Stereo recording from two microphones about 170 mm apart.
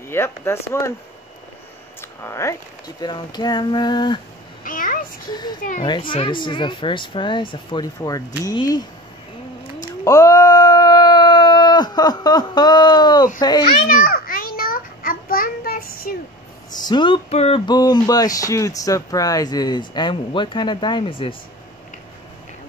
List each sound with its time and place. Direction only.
0.1 s speech: 15° left (ahead or behind)
2.0 s a sound: 15° left (ahead or behind)
3.0 s speech: 25° left (ahead or behind)
4.6 s a sound: 50° left (ahead or behind)
5.3 s speech: 25° left (ahead or behind)
10.0 s a sound: 20° left (ahead or behind)
13.4 s speech: 25° left (ahead or behind)
13.8 s child singing: 60° left (ahead or behind)
16.7 s speech: 25° left (ahead or behind)
17.6 s speech: 25° left (ahead or behind)